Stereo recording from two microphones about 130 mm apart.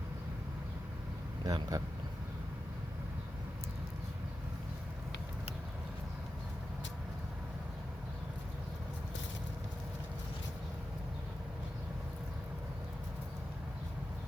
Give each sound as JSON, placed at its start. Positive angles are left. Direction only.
{"t": 1.5, "sound": "speech", "side_deg": -30}